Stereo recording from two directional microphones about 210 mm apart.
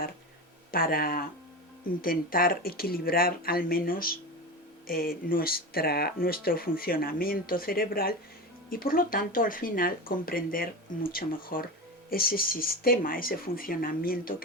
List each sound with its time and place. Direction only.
0.7 s speech: 45° left (ahead or behind)